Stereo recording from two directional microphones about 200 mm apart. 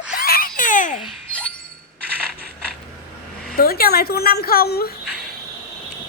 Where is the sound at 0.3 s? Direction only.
45° left (ahead or behind).